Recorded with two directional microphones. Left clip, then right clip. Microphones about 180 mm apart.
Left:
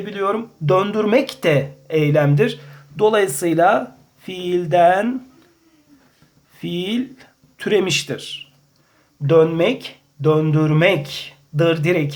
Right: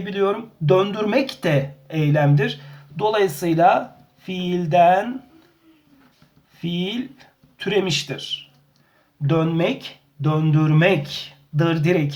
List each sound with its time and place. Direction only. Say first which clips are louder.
0.1 s speech: even; 30° left (ahead or behind)
6.6 s speech: left 3 dB; 40° left (ahead or behind)
9.2 s speech: left 7 dB; 20° left (ahead or behind)